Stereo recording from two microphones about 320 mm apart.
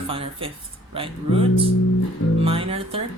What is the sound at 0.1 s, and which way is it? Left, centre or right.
Speech, centre.